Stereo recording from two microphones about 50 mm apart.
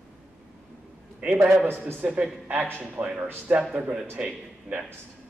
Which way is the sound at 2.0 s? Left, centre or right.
Right.